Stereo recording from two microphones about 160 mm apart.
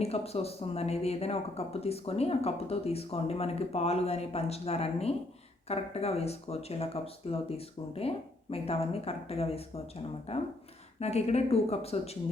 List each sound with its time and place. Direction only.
0.0 s speech: 40° left (ahead or behind)